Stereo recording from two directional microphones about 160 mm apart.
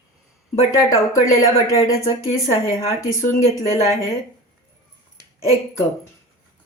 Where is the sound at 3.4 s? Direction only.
45° left (ahead or behind).